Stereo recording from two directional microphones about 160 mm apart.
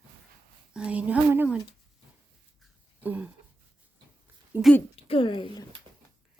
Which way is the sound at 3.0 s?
10° right (ahead or behind).